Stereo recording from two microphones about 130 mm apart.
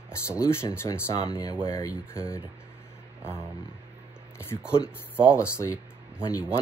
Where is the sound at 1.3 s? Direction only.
30° left (ahead or behind).